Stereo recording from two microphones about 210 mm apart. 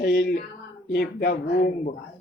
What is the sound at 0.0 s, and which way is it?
Speech, 50° left (ahead or behind).